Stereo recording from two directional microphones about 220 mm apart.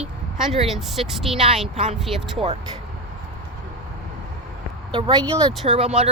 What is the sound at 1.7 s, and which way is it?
Speech, 30° right (ahead or behind).